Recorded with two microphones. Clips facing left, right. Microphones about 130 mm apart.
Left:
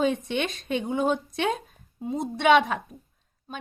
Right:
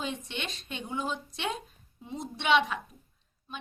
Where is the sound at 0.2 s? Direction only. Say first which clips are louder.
Left 10 dB; 55° left (ahead or behind).